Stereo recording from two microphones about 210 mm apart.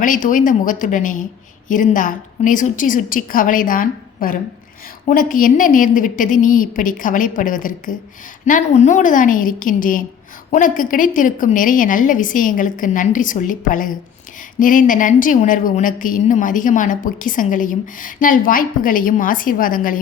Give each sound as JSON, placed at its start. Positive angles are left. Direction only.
{"t": 0.0, "sound": "a woman's voice", "side_deg": 40}